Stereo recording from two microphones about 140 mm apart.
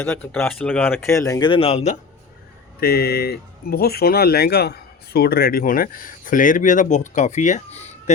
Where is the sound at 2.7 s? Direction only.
90° left.